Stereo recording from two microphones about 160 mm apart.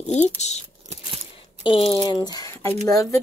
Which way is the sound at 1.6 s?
35° left (ahead or behind).